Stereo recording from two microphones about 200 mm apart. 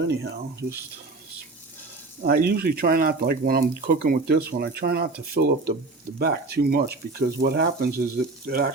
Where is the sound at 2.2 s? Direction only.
50° right (ahead or behind).